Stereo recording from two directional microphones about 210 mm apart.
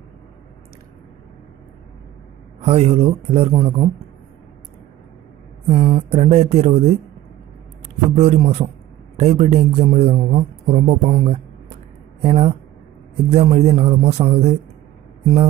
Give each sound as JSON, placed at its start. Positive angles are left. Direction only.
{"t": 2.6, "sound": "speech", "side_deg": -30}
{"t": 5.7, "sound": "speech", "side_deg": -30}
{"t": 8.2, "sound": "a man's voice", "side_deg": -30}